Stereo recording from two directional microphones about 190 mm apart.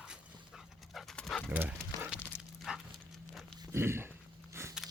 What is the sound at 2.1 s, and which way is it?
Dog, 10° left (ahead or behind).